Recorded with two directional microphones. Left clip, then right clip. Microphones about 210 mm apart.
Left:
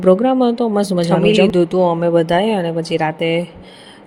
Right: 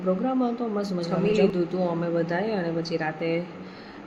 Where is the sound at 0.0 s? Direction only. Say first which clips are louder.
Left 13 dB; 40° left (ahead or behind).